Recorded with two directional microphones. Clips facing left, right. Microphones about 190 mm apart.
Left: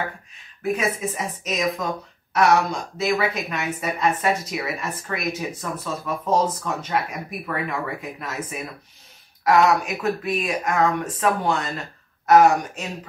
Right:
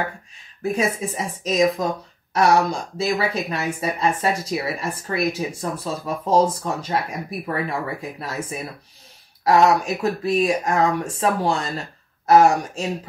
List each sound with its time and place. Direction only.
0.6 s a woman's voice: 30° right (ahead or behind)